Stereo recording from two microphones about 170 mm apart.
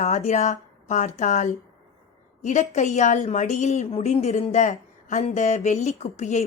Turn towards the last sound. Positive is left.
turn(degrees=40)  # may be behind; listen again after turning